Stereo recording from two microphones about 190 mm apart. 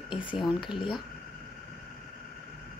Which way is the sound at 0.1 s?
25° left (ahead or behind).